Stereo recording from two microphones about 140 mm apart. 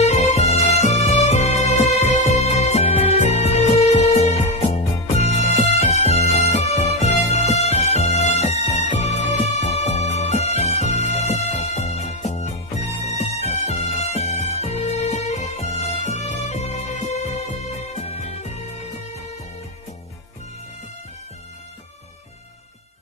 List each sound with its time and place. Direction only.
0.0 s music: 55° left (ahead or behind)